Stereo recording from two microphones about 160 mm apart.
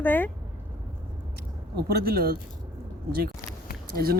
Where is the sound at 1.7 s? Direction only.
75° right (ahead or behind).